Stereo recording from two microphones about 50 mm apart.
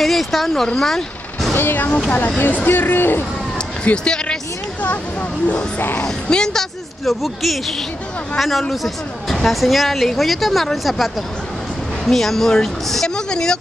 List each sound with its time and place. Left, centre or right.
0.0 s speech: centre
1.5 s speech: left
2.1 s speech: left
3.8 s speech: centre
6.2 s speech: centre